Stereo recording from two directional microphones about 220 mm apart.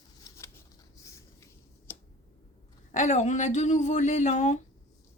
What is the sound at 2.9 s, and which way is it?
Speech, 35° left (ahead or behind).